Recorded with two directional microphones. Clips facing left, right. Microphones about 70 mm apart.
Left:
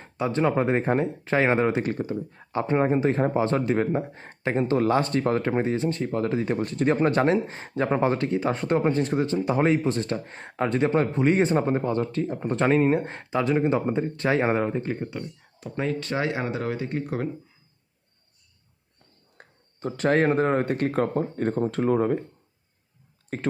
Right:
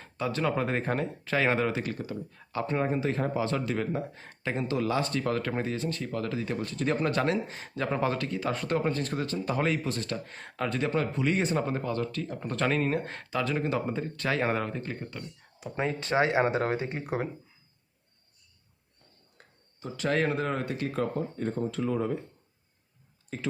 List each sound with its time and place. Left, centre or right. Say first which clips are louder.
0.0 s speech: left 6 dB; left
15.7 s speech: left 1 dB; centre
16.9 s speech: left 3 dB; centre
19.4 s speech: left 9 dB; left
23.3 s speech: left 6 dB; left